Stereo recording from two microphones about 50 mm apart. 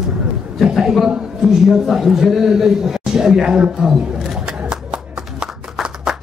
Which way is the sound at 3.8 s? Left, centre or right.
Centre.